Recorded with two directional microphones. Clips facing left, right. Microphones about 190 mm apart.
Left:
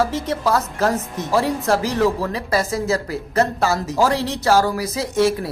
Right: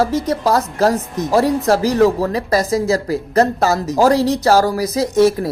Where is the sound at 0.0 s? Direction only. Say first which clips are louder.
Right 4 dB; 40° right (ahead or behind).